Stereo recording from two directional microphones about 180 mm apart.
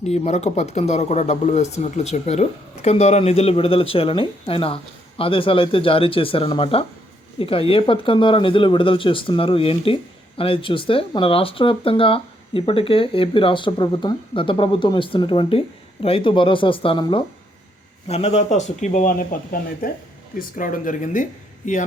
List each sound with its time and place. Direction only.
0.0 s speech: 40° left (ahead or behind)